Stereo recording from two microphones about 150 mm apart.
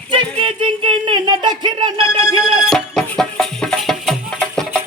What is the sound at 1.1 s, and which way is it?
Speech, 30° right (ahead or behind).